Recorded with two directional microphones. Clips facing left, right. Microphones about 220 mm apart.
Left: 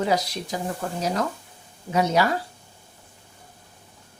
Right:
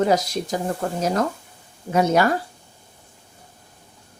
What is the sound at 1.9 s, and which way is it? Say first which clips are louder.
Speech: right 3 dB; 50° right (ahead or behind).